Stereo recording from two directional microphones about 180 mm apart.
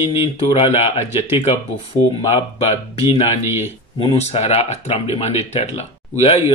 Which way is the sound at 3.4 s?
10° right (ahead or behind).